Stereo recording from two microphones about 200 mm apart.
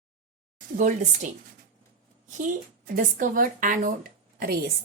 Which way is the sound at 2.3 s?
40° right (ahead or behind).